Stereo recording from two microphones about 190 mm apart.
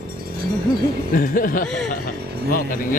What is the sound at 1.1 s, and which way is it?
Speech, 45° left (ahead or behind).